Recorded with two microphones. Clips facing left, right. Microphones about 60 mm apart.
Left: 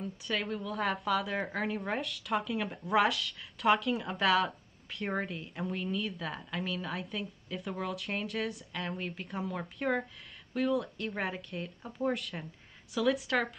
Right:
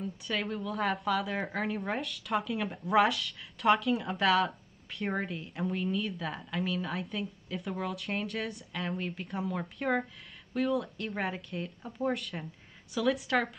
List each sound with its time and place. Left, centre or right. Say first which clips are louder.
0.0 s a woman's voice: right 1 dB; centre